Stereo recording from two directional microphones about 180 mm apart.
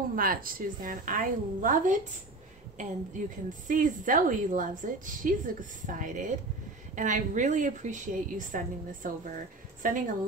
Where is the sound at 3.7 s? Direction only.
50° right (ahead or behind).